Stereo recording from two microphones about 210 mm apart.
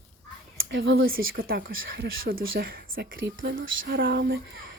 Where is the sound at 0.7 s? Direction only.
55° right (ahead or behind).